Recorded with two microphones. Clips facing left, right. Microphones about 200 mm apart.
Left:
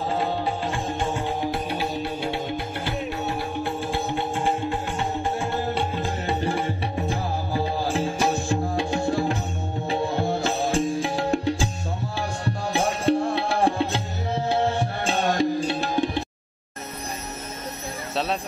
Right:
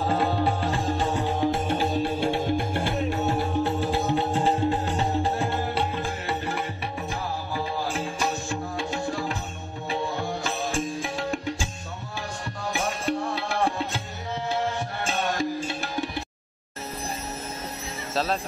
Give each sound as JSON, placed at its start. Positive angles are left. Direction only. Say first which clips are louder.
{"t": 0.7, "sound": "music", "louder": "right 1 dB", "side_deg": -40}
{"t": 6.4, "sound": "music", "louder": "left 5 dB", "side_deg": 30}
{"t": 14.7, "sound": "tabla", "louder": "left 4 dB", "side_deg": 30}
{"t": 18.1, "sound": "jingle bell", "louder": "even", "side_deg": 0}